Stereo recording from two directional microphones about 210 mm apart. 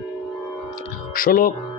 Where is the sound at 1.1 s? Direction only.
45° left (ahead or behind).